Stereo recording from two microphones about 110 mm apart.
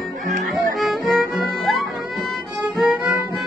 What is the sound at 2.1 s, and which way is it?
Violin, centre (ahead or behind).